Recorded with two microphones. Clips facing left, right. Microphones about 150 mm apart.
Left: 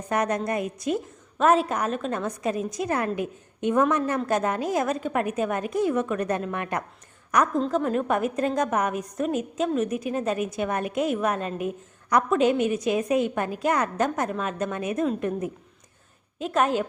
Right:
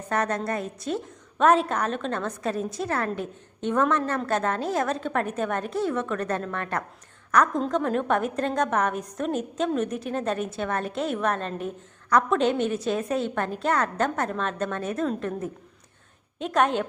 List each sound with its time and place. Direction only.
0.1 s a woman's voice: 15° left (ahead or behind)